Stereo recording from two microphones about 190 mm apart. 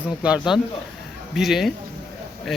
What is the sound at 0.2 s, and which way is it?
Speech, 5° right (ahead or behind).